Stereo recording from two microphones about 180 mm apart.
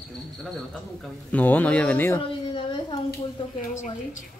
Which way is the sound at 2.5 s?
25° left (ahead or behind).